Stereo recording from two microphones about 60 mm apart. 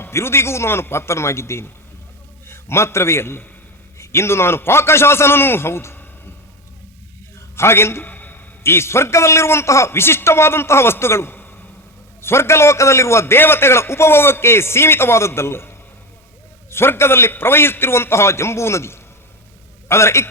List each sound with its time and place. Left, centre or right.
0.0 s a man's voice: left
7.5 s a man's voice: left
8.0 s a sound: left
8.6 s a man's voice: left